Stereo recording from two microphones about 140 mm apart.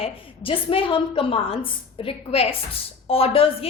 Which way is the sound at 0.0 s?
40° left (ahead or behind).